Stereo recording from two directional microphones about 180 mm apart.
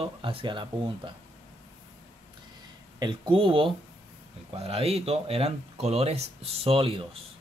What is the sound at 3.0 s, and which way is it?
Speech, 25° right (ahead or behind).